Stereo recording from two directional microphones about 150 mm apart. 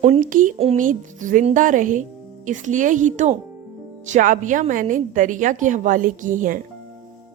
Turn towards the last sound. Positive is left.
turn(degrees=-60)  # may be behind; listen again after turning